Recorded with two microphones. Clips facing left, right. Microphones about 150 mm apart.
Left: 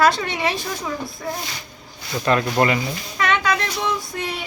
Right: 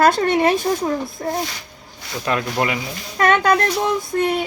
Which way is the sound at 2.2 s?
5° right (ahead or behind).